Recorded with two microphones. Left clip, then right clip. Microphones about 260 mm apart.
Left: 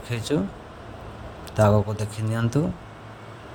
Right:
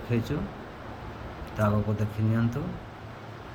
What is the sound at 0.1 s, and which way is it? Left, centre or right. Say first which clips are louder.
Speech: right 2 dB; left.